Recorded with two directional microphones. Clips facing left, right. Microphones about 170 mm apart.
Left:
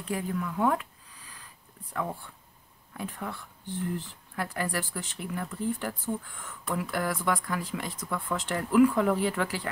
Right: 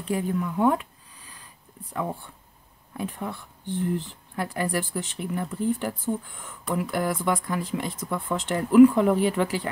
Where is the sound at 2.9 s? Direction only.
20° right (ahead or behind).